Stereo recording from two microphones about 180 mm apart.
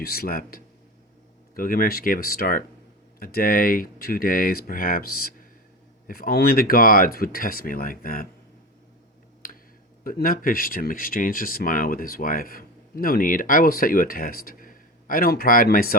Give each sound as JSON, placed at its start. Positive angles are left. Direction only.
{"t": 0.0, "sound": "speech", "side_deg": 55}
{"t": 9.4, "sound": "tick", "side_deg": 55}
{"t": 10.0, "sound": "speech", "side_deg": 50}